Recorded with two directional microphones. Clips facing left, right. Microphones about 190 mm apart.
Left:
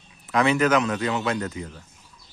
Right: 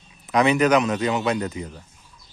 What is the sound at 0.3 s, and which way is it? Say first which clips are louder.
Speech: right 2 dB; 15° right (ahead or behind).